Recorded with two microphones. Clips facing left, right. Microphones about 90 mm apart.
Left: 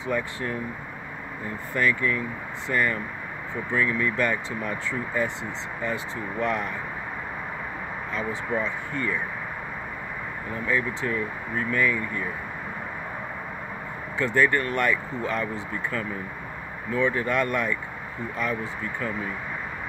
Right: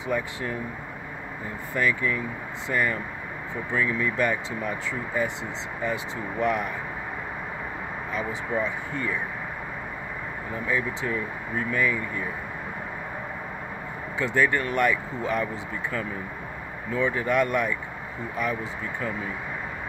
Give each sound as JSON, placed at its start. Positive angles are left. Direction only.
{"t": 0.0, "sound": "speech", "side_deg": -15}
{"t": 1.8, "sound": "speech", "side_deg": -15}
{"t": 6.4, "sound": "speech", "side_deg": -15}
{"t": 8.1, "sound": "speech", "side_deg": -15}
{"t": 10.7, "sound": "speech", "side_deg": -20}
{"t": 14.1, "sound": "speech", "side_deg": -15}